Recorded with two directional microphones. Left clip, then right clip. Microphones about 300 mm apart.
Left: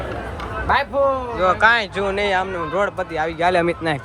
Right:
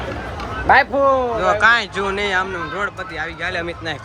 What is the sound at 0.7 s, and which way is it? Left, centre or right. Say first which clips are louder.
Speech: right 5 dB; right.